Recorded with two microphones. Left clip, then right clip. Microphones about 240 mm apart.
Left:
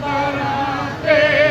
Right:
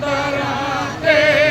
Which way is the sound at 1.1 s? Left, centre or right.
Right.